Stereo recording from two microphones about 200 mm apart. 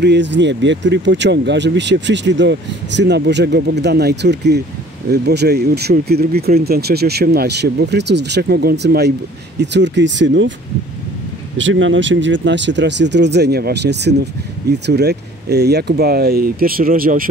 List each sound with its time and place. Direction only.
0.0 s speech: 60° right (ahead or behind)
11.5 s speech: 70° right (ahead or behind); by 17.2 s 45° right (ahead or behind)